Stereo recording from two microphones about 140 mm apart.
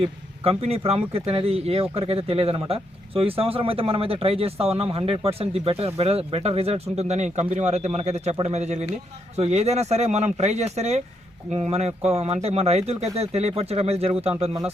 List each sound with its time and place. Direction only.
0.4 s speech: 45° right (ahead or behind)